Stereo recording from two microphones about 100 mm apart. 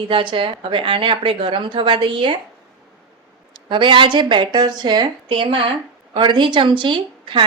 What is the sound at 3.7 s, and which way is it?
A woman's voice, 55° right (ahead or behind).